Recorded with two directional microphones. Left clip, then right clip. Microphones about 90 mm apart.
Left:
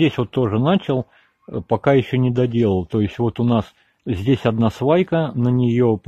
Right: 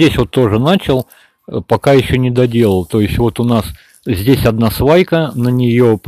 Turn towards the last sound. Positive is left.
turn(degrees=-40)  # may be behind; listen again after turning